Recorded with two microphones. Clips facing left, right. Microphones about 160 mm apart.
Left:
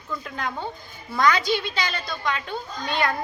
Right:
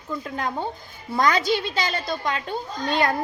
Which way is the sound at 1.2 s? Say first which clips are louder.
Even; 45° right (ahead or behind).